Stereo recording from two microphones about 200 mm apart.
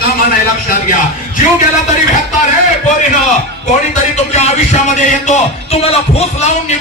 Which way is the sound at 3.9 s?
35° left (ahead or behind).